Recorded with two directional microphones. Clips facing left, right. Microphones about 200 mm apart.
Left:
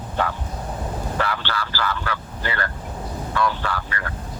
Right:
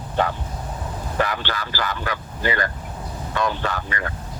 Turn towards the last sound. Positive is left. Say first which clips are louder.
# right 2 dB
turn(degrees=-20)  # may be behind; listen again after turning